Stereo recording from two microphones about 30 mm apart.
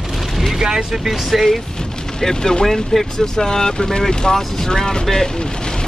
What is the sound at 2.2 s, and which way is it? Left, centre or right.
Speech, left.